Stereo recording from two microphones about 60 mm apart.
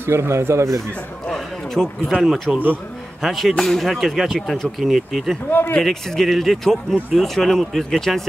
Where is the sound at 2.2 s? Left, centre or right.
Centre.